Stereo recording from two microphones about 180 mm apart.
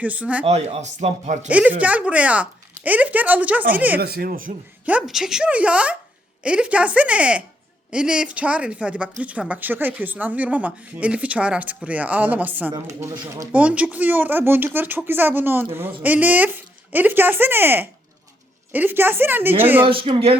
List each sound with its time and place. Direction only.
0.0 s speech: 10° right (ahead or behind)
0.4 s speech: 40° right (ahead or behind)
1.5 s speech: 5° right (ahead or behind)
4.0 s speech: 60° right (ahead or behind)
4.9 s speech: 5° right (ahead or behind)
19.8 s speech: 30° right (ahead or behind)